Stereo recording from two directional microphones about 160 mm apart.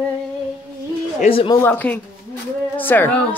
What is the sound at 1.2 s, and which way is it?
Speech, 35° left (ahead or behind).